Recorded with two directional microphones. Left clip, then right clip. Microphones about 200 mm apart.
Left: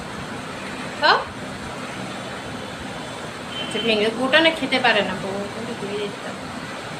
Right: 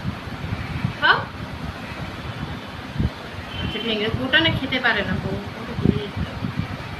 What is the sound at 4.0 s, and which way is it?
A woman's voice, 20° right (ahead or behind).